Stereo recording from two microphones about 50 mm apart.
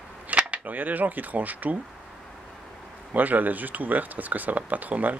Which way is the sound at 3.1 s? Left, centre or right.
Right.